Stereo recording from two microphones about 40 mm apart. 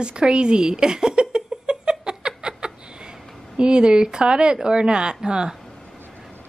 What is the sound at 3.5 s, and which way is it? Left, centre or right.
Speech, right.